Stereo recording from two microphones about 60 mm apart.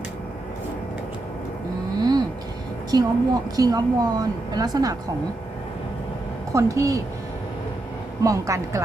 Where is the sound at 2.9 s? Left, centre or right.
Right.